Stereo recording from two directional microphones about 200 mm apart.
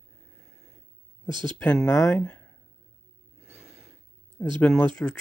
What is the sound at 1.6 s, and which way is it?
Speech, 5° left (ahead or behind).